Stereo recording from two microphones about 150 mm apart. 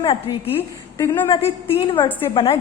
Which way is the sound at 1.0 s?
15° left (ahead or behind).